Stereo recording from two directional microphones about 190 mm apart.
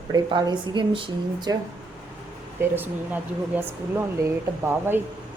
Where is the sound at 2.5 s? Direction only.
10° right (ahead or behind).